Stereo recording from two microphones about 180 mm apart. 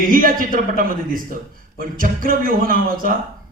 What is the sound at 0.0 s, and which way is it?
A man's voice, 50° right (ahead or behind).